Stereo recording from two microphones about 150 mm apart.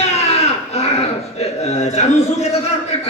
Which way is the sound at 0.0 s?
45° left (ahead or behind).